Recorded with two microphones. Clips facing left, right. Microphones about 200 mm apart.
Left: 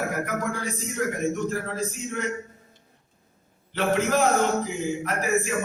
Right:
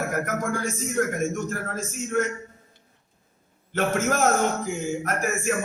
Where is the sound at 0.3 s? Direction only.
45° right (ahead or behind).